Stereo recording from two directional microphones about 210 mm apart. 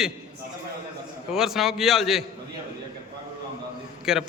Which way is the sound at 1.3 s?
Centre (ahead or behind).